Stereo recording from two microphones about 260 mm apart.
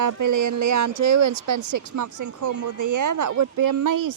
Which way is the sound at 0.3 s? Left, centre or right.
Right.